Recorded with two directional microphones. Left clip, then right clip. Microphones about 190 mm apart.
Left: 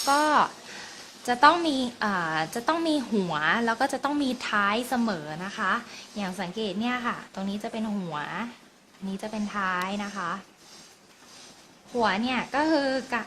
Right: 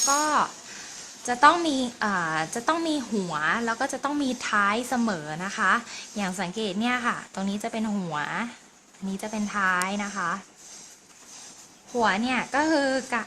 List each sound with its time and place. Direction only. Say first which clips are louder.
0.0 s a woman's voice: left 1 dB; 5° left (ahead or behind)
11.9 s a woman's voice: right 2 dB; 10° right (ahead or behind)